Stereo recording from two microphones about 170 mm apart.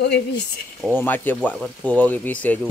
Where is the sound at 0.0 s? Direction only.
85° left.